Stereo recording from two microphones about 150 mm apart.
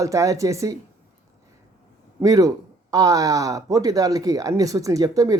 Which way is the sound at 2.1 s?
25° right (ahead or behind).